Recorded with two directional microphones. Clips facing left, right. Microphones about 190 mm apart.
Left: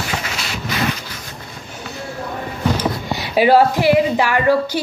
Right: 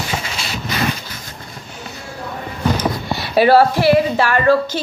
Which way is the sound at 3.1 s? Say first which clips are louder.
Right 1 dB; 15° left (ahead or behind).